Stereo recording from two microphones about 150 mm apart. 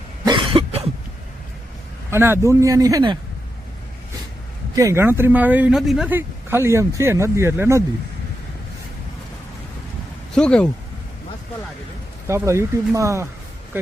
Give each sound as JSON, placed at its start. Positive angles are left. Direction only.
{"t": 0.3, "sound": "cough", "side_deg": -35}
{"t": 2.0, "sound": "a man's voice", "side_deg": -15}
{"t": 4.7, "sound": "a man's voice", "side_deg": -20}
{"t": 6.1, "sound": "speech", "side_deg": -15}
{"t": 10.3, "sound": "a man's voice", "side_deg": 5}
{"t": 12.3, "sound": "a man's voice", "side_deg": -20}